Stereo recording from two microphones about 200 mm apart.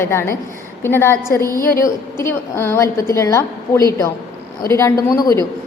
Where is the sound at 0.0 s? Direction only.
10° left (ahead or behind).